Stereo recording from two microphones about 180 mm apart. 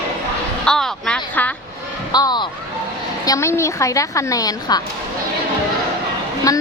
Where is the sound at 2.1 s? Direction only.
20° left (ahead or behind).